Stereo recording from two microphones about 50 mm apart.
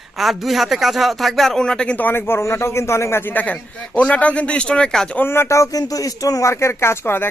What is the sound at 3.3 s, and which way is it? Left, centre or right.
A man's voice, left.